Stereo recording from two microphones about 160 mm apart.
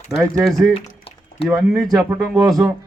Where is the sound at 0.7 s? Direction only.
35° left (ahead or behind).